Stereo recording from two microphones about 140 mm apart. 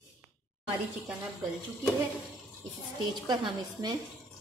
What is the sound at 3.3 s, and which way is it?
Speech, 30° right (ahead or behind).